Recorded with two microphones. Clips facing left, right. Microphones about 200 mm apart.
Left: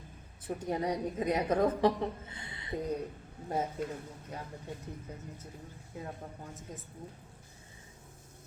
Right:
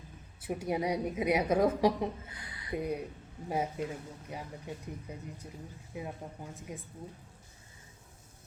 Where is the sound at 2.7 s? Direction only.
10° right (ahead or behind).